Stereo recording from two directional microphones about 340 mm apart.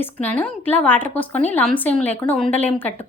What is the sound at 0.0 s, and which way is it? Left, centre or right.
A woman's voice, centre.